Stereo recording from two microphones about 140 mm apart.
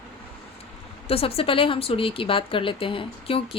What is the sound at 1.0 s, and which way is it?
Speech, 45° left (ahead or behind).